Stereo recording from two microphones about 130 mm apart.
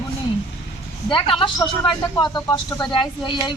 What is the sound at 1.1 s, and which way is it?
Speech, 40° left (ahead or behind).